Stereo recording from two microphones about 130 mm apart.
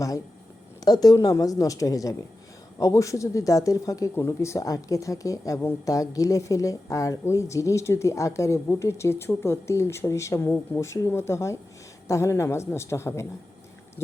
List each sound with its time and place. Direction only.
0.9 s speech: 30° left (ahead or behind)